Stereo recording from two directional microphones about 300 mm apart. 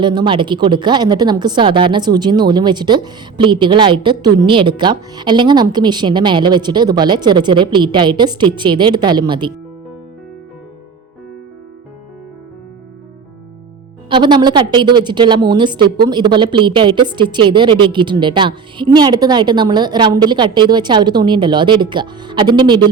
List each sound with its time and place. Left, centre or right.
0.0 s a woman's voice: centre
14.1 s a woman's voice: centre